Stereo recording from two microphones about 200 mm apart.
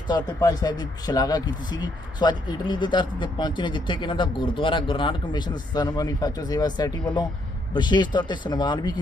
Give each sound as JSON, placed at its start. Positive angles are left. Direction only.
{"t": 0.1, "sound": "speech", "side_deg": 20}